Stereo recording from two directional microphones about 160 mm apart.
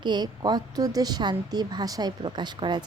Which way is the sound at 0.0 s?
25° right (ahead or behind).